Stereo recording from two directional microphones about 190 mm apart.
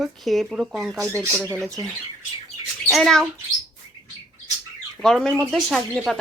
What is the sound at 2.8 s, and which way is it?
Speech, centre (ahead or behind).